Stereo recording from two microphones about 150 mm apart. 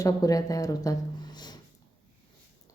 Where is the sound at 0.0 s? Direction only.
25° left (ahead or behind).